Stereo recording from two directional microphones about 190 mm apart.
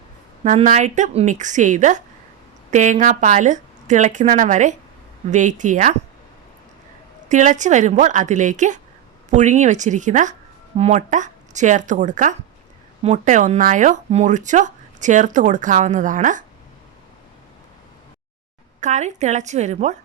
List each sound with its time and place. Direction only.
0.4 s speech: 40° right (ahead or behind)
7.3 s speech: 40° right (ahead or behind)
18.8 s speech: 40° right (ahead or behind)